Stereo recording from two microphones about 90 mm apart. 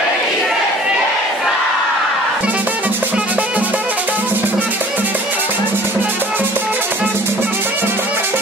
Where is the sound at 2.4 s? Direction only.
20° right (ahead or behind).